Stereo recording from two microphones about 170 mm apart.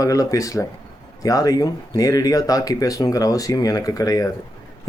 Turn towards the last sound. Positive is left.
turn(degrees=20)  # may be behind; listen again after turning